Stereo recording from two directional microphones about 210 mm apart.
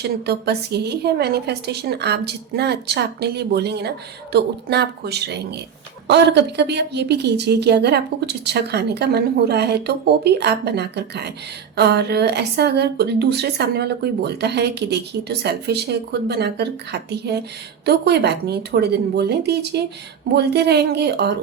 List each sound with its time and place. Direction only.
0.0 s a woman's voice: 50° right (ahead or behind)